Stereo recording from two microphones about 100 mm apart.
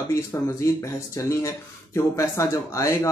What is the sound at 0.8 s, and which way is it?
Speech, 30° left (ahead or behind).